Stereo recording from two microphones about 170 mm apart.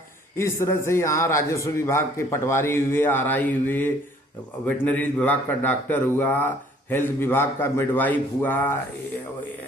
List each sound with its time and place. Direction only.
0.3 s a man's voice: 15° left (ahead or behind)